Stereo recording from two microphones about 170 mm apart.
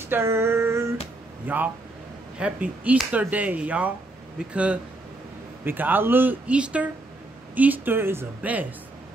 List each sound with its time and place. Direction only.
0.1 s female singing: 15° right (ahead or behind)
1.5 s speech: 10° right (ahead or behind)
5.7 s speech: 10° right (ahead or behind)